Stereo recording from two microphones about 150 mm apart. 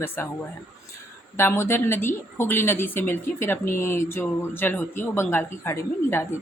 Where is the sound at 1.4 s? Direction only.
15° left (ahead or behind).